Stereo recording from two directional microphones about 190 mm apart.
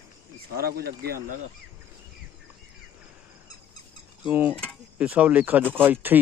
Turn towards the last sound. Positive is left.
turn(degrees=-10)  # may be behind; listen again after turning